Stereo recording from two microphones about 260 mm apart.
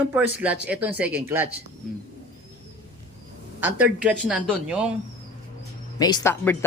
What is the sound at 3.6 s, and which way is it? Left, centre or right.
Speech, centre.